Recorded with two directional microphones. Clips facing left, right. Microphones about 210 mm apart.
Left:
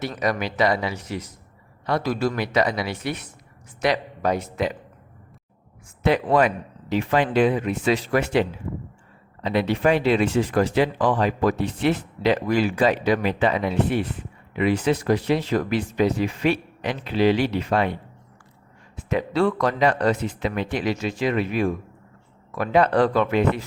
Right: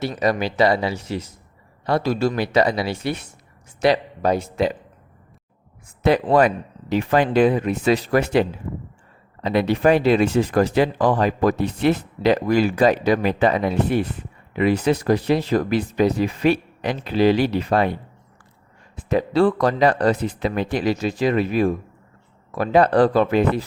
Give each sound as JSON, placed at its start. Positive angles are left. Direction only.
{"t": 0.2, "sound": "speech", "side_deg": -30}
{"t": 6.0, "sound": "speech", "side_deg": -35}
{"t": 18.9, "sound": "speech", "side_deg": -35}